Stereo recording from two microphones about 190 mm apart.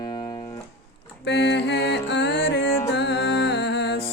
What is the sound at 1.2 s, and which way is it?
Music, 65° left (ahead or behind).